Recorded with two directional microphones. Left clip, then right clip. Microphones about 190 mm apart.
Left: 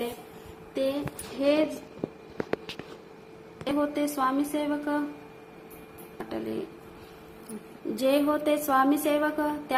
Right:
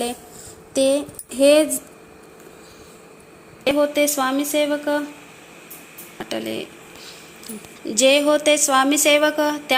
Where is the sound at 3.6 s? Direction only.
25° right (ahead or behind).